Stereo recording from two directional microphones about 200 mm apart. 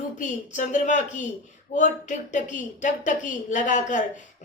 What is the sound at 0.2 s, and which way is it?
A woman's voice, 40° left (ahead or behind).